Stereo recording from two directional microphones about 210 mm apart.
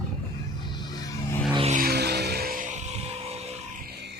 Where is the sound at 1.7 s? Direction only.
50° right (ahead or behind).